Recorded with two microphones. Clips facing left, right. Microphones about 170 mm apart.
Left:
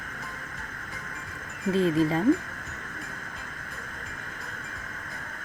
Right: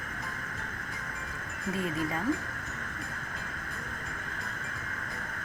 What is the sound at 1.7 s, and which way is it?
Speech, 30° left (ahead or behind).